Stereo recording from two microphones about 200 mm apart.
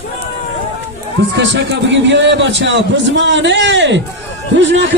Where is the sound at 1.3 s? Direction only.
60° right (ahead or behind).